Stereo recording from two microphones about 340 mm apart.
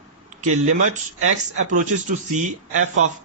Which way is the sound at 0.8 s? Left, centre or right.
Right.